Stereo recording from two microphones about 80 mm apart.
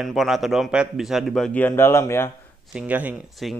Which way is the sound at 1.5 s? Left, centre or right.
Left.